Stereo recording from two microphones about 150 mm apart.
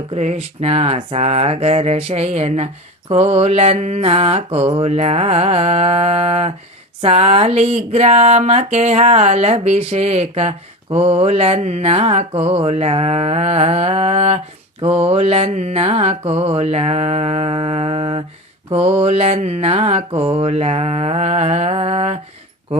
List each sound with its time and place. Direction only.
0.1 s mantra: 45° right (ahead or behind)
7.0 s speech: 40° right (ahead or behind)
7.9 s mantra: 45° right (ahead or behind)
18.7 s speech: 40° right (ahead or behind)
19.0 s mantra: 45° right (ahead or behind)
22.7 s speech: 45° right (ahead or behind)